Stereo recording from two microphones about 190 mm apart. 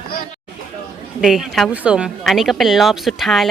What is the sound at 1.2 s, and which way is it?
Speech, centre (ahead or behind).